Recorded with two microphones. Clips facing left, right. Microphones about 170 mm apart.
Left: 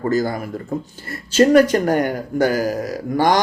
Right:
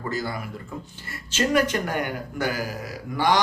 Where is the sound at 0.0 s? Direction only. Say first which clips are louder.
Left 10 dB; 45° left (ahead or behind).